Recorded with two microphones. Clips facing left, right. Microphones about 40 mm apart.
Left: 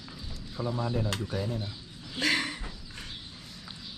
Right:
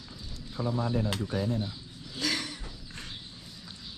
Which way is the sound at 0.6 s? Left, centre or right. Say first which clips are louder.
Right 1 dB; right.